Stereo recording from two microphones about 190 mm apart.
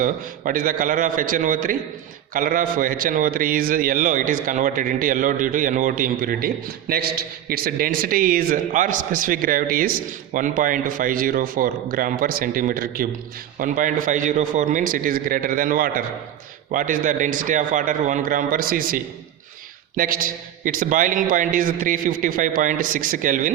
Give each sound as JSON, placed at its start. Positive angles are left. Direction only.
{"t": 0.0, "sound": "a man's voice", "side_deg": -45}